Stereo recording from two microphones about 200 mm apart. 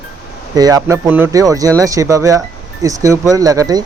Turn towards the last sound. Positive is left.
turn(degrees=-20)  # may be behind; listen again after turning